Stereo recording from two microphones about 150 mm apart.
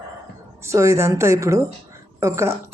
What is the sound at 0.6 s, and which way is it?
Speech, 20° right (ahead or behind).